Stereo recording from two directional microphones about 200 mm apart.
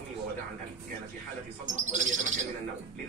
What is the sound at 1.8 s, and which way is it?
Speech, 40° right (ahead or behind).